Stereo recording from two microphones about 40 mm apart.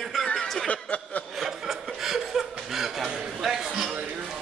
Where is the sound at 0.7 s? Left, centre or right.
Left.